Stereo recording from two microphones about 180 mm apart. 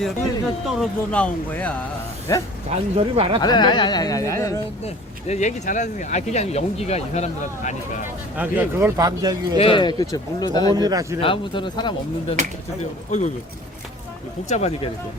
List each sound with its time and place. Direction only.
0.8 s speech: 5° left (ahead or behind)
2.3 s speech: 15° left (ahead or behind)
2.6 s speech: 35° right (ahead or behind)
3.4 s speech: 25° left (ahead or behind)
5.3 s speech: 40° left (ahead or behind)
8.0 s a man's voice: 10° right (ahead or behind)
9.6 s speech: 30° left (ahead or behind)
10.8 s speech: 20° right (ahead or behind)
11.2 s speech: 30° left (ahead or behind)
13.1 s speech: 40° left (ahead or behind)